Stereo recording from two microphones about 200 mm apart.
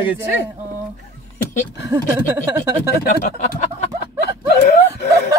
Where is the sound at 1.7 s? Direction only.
20° right (ahead or behind).